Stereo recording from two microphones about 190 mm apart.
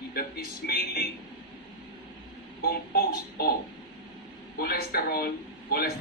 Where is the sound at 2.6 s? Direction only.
55° left (ahead or behind).